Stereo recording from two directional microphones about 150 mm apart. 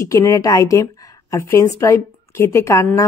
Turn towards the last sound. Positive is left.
turn(degrees=20)  # may be behind; listen again after turning